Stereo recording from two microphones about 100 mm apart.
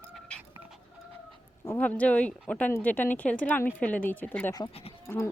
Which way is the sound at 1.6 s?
15° left (ahead or behind).